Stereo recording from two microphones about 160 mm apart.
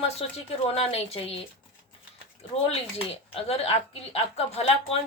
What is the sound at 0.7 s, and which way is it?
Speech, 40° left (ahead or behind).